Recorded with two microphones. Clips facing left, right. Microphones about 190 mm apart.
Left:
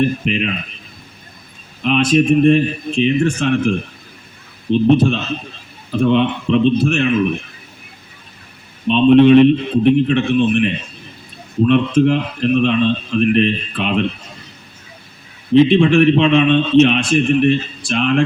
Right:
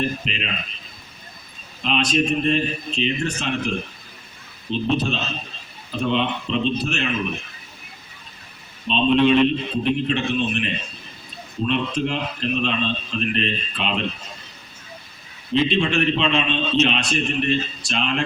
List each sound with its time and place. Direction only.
0.0 s a man's voice: 60° left (ahead or behind)
1.8 s a man's voice: 55° left (ahead or behind)
8.9 s a man's voice: 55° left (ahead or behind)
15.6 s a man's voice: 55° left (ahead or behind)